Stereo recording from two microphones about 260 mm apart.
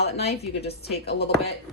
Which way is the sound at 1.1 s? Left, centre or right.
Left.